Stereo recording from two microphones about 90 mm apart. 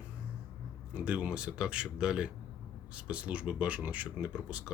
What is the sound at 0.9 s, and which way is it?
Speech, 15° right (ahead or behind).